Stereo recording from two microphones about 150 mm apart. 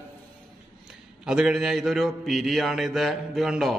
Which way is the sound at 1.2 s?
5° right (ahead or behind).